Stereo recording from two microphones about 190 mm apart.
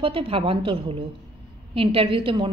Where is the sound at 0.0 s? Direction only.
30° right (ahead or behind).